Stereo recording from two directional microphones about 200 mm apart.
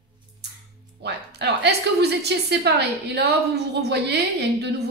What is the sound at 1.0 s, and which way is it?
A woman's voice, 55° right (ahead or behind).